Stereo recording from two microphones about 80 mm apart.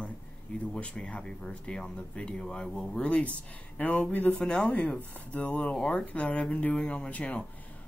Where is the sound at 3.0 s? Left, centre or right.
Centre.